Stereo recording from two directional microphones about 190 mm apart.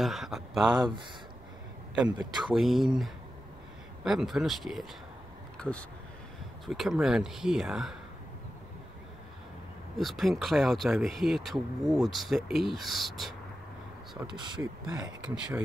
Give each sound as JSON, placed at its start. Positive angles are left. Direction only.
{"t": 0.0, "sound": "speech", "side_deg": 0}
{"t": 2.4, "sound": "speech", "side_deg": 0}
{"t": 9.9, "sound": "speech", "side_deg": 0}
{"t": 14.2, "sound": "speech", "side_deg": -25}
{"t": 15.0, "sound": "speech", "side_deg": -5}